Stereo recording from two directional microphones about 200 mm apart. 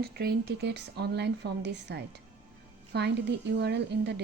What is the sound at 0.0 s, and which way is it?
Speech, 50° right (ahead or behind).